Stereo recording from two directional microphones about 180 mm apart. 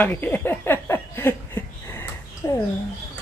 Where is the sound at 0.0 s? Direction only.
10° left (ahead or behind).